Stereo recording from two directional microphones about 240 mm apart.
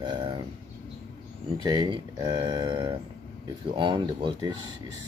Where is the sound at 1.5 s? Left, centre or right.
Centre.